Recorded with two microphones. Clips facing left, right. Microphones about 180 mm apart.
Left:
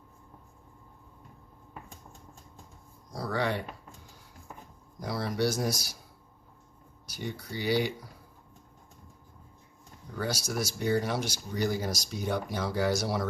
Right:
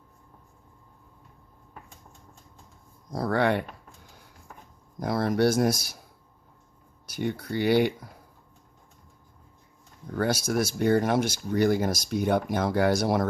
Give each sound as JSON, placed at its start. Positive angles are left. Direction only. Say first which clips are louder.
{"t": 3.1, "sound": "speech", "louder": "right 6 dB", "side_deg": -50}
{"t": 4.9, "sound": "speech", "louder": "right 6 dB", "side_deg": -50}
{"t": 7.1, "sound": "speech", "louder": "right 8 dB", "side_deg": -55}
{"t": 10.2, "sound": "speech", "louder": "right 7 dB", "side_deg": -55}